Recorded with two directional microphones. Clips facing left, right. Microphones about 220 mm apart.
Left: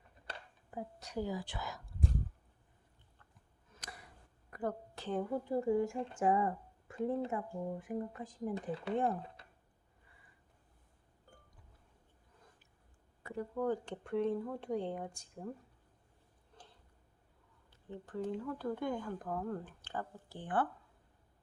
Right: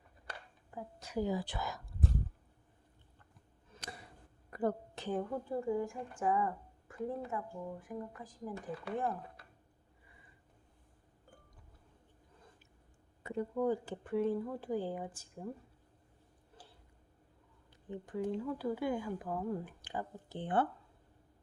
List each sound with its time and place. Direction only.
0.3 s a sound: 20° left (ahead or behind)
0.9 s a woman's voice: centre (ahead or behind)
1.4 s speech: 40° right (ahead or behind)
3.8 s a sound: 25° right (ahead or behind)
5.1 s a woman's voice: 5° left (ahead or behind)
5.5 s a woman's voice: 20° left (ahead or behind)
13.2 s speech: 20° right (ahead or behind)
13.7 s speech: 5° right (ahead or behind)
16.6 s a sound: 5° right (ahead or behind)
17.7 s speech: 15° right (ahead or behind)